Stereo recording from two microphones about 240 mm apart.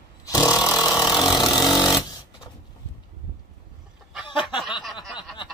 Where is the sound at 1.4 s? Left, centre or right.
Centre.